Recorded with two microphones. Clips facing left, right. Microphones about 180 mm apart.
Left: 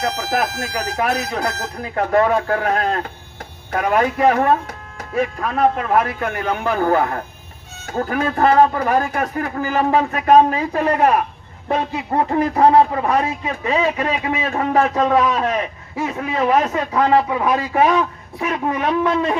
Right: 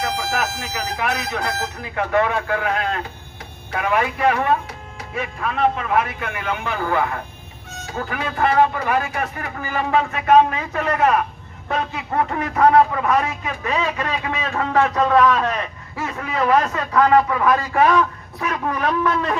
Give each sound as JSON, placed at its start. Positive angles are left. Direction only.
{"t": 0.0, "sound": "speech", "side_deg": 45}